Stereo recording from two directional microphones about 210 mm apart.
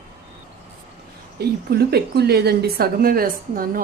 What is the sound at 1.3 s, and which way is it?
A woman's voice, 50° right (ahead or behind).